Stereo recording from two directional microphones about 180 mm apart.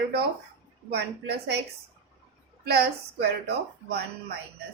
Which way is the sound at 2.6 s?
65° right (ahead or behind).